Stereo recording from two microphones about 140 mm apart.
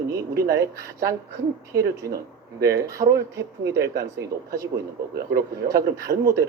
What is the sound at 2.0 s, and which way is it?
Speech, 90° right.